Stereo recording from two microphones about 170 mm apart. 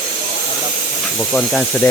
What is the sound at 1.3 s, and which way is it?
Speech, 5° left (ahead or behind).